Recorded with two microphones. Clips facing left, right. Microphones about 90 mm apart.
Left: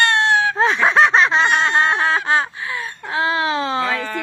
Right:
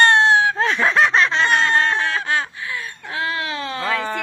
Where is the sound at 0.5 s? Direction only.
30° left (ahead or behind).